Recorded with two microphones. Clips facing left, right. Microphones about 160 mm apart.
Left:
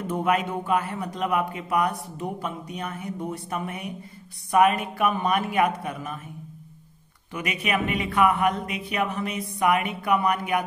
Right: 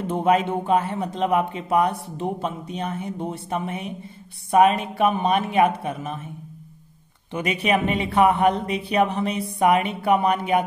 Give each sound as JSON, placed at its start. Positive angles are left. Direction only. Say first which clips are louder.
{"t": 0.0, "sound": "speech", "louder": "right 4 dB", "side_deg": -25}
{"t": 7.3, "sound": "speech", "louder": "right 5 dB", "side_deg": -30}